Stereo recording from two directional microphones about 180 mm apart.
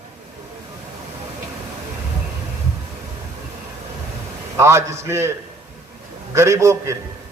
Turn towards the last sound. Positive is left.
turn(degrees=-15)  # may be behind; listen again after turning